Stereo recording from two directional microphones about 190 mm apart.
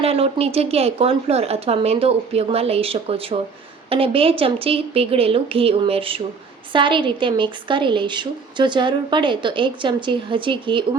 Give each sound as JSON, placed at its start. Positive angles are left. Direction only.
{"t": 0.0, "sound": "a woman's voice", "side_deg": -30}